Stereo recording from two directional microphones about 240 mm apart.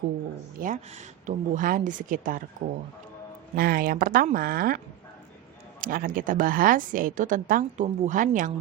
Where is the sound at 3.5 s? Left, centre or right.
Right.